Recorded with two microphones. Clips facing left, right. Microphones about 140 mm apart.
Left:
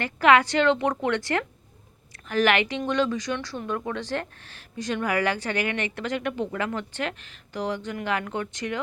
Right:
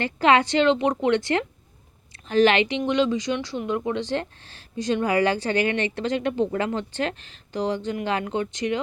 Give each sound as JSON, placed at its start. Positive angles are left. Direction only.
{"t": 0.0, "sound": "speech", "side_deg": -25}